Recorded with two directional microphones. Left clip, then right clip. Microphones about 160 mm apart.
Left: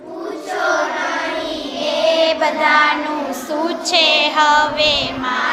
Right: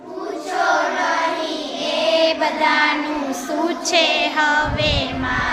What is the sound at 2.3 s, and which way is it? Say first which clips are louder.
Child singing: left 3 dB; 25° right (ahead or behind).